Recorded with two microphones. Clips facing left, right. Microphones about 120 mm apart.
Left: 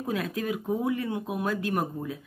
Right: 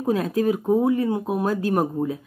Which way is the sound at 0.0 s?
35° right (ahead or behind).